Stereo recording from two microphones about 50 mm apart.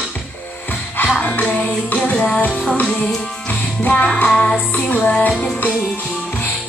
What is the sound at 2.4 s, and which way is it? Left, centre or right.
Music, left.